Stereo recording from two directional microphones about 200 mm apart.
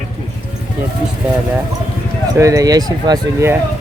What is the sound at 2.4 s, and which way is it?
Speech, 15° right (ahead or behind).